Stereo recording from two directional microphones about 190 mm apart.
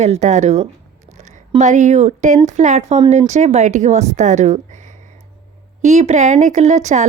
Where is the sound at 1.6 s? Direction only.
40° right (ahead or behind).